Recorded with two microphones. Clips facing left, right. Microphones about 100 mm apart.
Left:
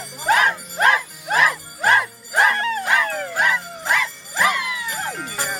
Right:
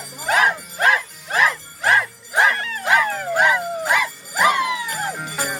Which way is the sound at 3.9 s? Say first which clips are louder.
Left 2 dB; 15° right (ahead or behind).